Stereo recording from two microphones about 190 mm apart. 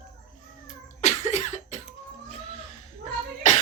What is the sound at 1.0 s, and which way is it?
Cough, 35° left (ahead or behind).